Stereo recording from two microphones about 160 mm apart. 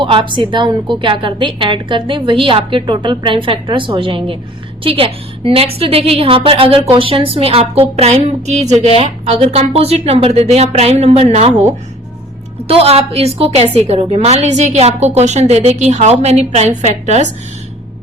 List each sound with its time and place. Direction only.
0.0 s a woman's voice: 30° right (ahead or behind)